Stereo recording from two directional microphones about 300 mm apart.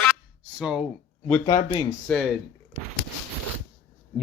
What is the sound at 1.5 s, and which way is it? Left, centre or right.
Speech, centre.